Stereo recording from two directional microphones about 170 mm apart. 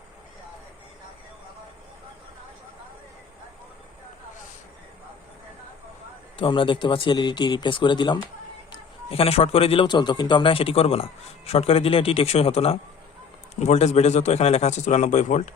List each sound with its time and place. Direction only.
6.3 s a man's voice: 30° left (ahead or behind)